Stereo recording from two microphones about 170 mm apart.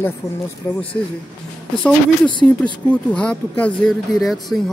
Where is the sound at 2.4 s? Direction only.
10° left (ahead or behind).